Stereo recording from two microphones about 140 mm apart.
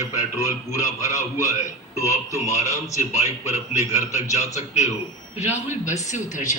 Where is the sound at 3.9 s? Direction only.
55° left (ahead or behind).